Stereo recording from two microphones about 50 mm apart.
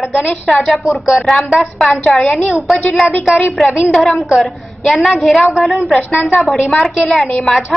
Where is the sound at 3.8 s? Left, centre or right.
Centre.